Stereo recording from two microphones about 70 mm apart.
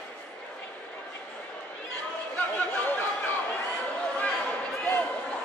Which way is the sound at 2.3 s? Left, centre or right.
Left.